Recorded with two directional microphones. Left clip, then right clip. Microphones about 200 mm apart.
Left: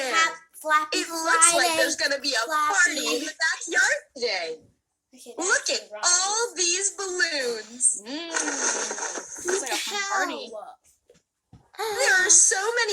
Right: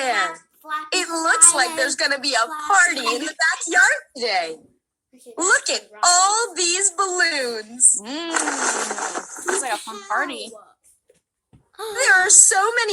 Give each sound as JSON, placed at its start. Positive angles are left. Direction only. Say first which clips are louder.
{"t": 0.0, "sound": "a sound", "louder": "right 2 dB", "side_deg": -40}
{"t": 0.6, "sound": "a child's voice", "louder": "left 6 dB", "side_deg": 0}
{"t": 0.9, "sound": "a woman's voice", "louder": "right 4 dB", "side_deg": -40}
{"t": 9.7, "sound": "a child's voice", "louder": "left 2 dB", "side_deg": -5}
{"t": 10.1, "sound": "a woman's voice", "louder": "right 7 dB", "side_deg": -35}
{"t": 11.7, "sound": "speech", "louder": "left 2 dB", "side_deg": -5}
{"t": 11.9, "sound": "a woman's voice", "louder": "right 5 dB", "side_deg": -40}